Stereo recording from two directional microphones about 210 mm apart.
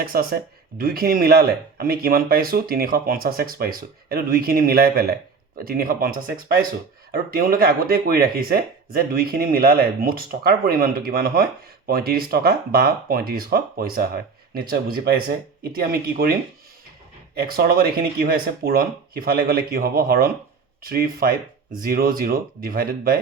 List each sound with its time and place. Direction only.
0.0 s speech: 45° right (ahead or behind)
17.4 s speech: 45° right (ahead or behind)